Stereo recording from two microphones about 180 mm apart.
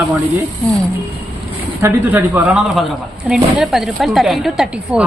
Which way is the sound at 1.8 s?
10° right (ahead or behind).